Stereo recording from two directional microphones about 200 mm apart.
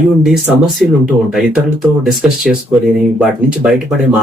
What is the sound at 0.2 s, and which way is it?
Speech, centre (ahead or behind).